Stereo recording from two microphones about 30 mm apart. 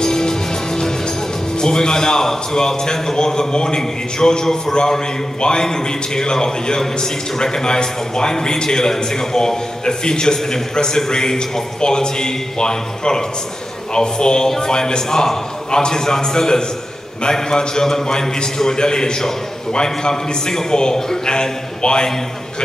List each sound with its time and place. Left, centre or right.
0.0 s music: left
1.6 s a man's voice: left